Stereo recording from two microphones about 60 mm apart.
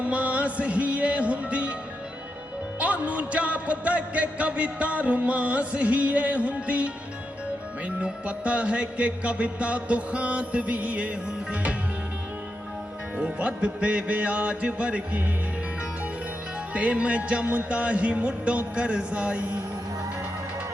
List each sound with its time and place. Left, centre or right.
0.0 s music: right
2.7 s music: right
13.1 s music: centre
16.7 s music: right